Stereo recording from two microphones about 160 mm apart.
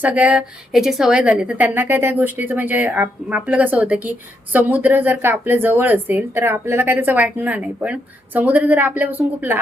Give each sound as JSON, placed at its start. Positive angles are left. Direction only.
{"t": 0.0, "sound": "speech", "side_deg": -10}